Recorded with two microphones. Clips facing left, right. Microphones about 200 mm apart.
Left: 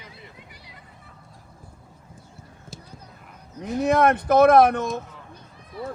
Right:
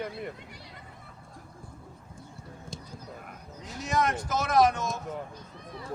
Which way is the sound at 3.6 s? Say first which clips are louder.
Left 10 dB; 60° left (ahead or behind).